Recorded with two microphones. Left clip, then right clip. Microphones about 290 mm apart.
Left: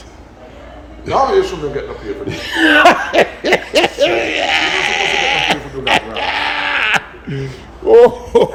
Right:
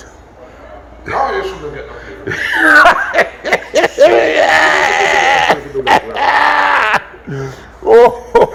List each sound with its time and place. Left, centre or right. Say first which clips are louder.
1.3 s a man's voice: left 4 dB; left
2.2 s snicker: right 3 dB; centre
3.9 s a sound: right 6 dB; centre
7.9 s speech: right 1 dB; centre